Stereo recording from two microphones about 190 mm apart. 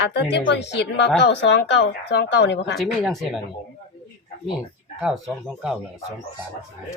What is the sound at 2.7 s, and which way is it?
Speech, centre (ahead or behind).